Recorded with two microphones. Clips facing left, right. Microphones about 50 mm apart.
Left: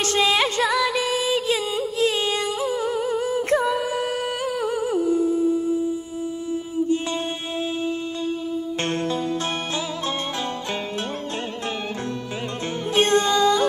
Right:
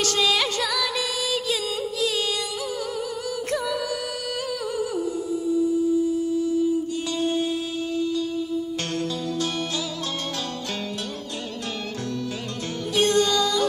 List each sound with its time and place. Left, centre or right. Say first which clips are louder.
0.0 s music: left 3 dB; left
2.6 s a sound: left 5 dB; left
4.6 s humming: left 6 dB; left
7.8 s music: right 1 dB; left
12.9 s music: left 2 dB; left